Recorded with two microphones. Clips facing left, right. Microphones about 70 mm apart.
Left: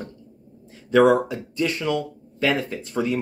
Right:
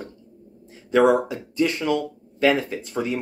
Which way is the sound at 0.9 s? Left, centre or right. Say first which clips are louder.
Left 1 dB; right.